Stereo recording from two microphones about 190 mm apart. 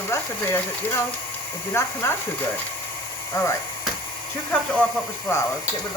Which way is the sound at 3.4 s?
15° left (ahead or behind).